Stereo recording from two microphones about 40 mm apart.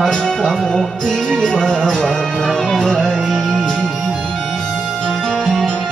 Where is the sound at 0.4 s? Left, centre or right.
Centre.